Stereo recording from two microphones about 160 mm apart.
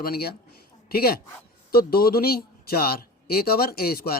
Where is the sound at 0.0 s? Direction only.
70° left (ahead or behind).